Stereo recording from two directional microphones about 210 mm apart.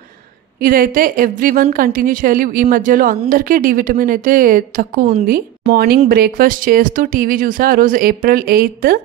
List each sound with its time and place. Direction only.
0.6 s a woman's voice: 45° right (ahead or behind)